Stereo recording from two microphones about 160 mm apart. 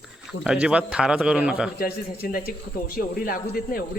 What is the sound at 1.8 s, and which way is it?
Speech, 65° left (ahead or behind).